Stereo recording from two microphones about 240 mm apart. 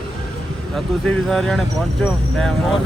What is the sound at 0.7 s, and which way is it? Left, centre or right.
Speech, centre.